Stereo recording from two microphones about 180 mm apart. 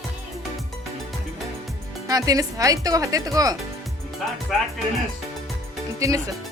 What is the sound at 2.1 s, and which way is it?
Speech, 20° right (ahead or behind).